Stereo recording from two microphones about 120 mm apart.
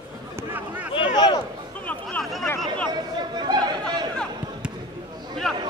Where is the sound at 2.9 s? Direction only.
35° right (ahead or behind).